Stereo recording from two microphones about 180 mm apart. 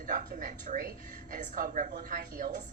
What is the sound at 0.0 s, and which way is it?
A woman's voice, 45° right (ahead or behind).